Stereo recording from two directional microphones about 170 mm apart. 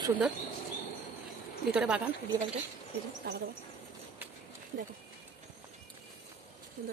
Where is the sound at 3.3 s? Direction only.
70° right (ahead or behind).